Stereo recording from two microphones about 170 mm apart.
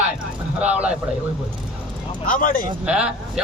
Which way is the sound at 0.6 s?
10° right (ahead or behind).